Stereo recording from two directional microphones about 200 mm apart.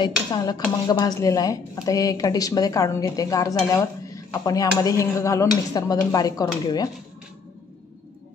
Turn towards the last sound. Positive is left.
turn(degrees=20)  # may be behind; listen again after turning